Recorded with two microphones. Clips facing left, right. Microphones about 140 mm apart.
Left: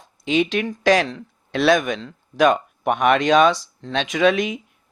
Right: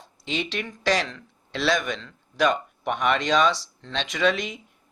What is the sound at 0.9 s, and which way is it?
Speech, 50° left (ahead or behind).